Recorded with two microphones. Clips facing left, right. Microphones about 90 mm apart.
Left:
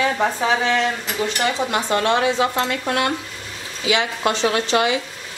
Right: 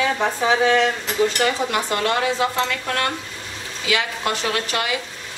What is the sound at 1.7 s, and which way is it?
Speech, 25° left (ahead or behind).